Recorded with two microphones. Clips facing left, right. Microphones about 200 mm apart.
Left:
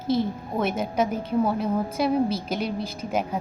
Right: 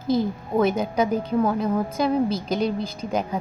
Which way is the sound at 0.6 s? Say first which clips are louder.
Right 4 dB; 5° left (ahead or behind).